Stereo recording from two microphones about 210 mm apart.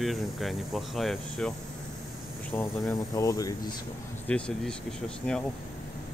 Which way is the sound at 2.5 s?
15° left (ahead or behind).